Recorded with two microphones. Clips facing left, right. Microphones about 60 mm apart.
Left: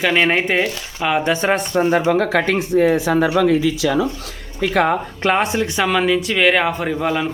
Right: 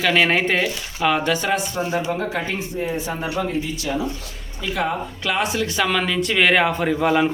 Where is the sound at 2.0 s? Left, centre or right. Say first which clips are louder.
Left 8 dB; left.